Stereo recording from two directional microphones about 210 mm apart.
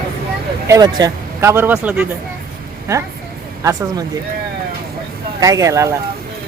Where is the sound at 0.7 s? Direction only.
20° right (ahead or behind).